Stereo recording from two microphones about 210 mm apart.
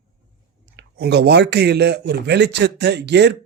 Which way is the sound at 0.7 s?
55° right (ahead or behind).